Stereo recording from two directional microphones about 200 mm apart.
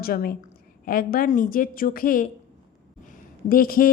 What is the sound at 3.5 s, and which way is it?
Speech, 45° left (ahead or behind).